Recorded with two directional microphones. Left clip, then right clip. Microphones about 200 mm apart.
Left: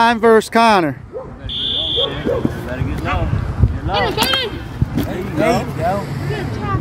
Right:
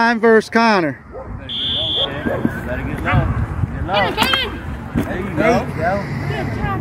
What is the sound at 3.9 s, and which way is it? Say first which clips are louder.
Speech: even; 35° right (ahead or behind).